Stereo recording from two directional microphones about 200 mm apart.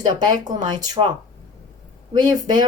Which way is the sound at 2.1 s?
20° right (ahead or behind).